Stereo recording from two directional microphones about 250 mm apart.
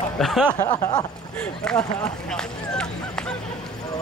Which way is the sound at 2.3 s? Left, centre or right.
Centre.